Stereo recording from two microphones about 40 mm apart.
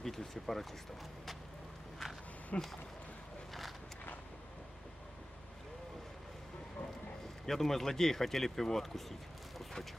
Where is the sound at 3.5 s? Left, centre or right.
Centre.